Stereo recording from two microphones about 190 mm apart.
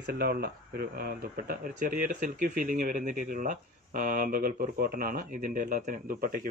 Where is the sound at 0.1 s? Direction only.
50° right (ahead or behind).